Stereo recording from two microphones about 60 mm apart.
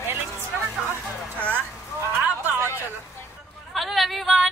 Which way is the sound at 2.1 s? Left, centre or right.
Right.